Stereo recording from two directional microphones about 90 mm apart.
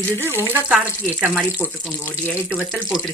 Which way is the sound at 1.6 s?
15° right (ahead or behind).